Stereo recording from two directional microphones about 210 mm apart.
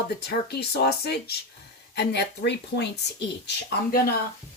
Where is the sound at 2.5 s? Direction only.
55° left (ahead or behind).